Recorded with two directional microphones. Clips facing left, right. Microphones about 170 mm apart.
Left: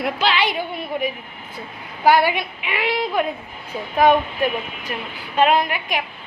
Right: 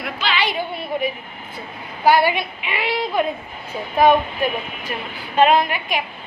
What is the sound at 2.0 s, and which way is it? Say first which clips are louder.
A woman's voice: even; 15° left (ahead or behind).